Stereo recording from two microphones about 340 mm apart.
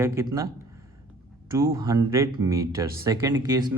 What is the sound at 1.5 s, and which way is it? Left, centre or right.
Speech, centre.